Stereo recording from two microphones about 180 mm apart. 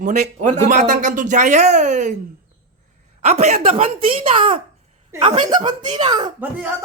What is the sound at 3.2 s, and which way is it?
Speech, 35° right (ahead or behind).